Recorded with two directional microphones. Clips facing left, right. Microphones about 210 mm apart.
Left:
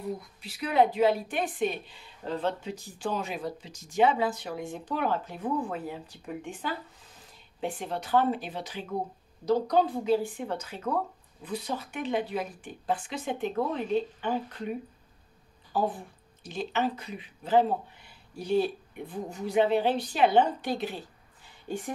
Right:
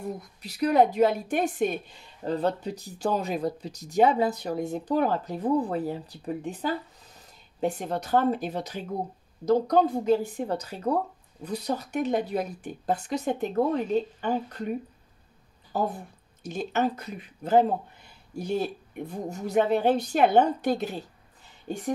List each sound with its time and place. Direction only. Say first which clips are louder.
0.0 s a woman's voice: right 1 dB; 40° right (ahead or behind)
15.7 s speech: even; 45° right (ahead or behind)